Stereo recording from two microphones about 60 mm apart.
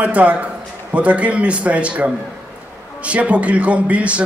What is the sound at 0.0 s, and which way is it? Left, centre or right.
A man's voice, right.